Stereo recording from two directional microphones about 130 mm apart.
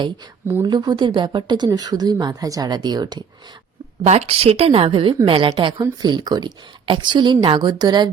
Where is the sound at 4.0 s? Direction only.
55° right (ahead or behind); by 8.1 s 30° right (ahead or behind).